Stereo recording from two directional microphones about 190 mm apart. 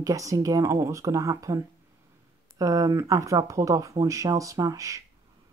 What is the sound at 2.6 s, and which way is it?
Speech, 15° right (ahead or behind).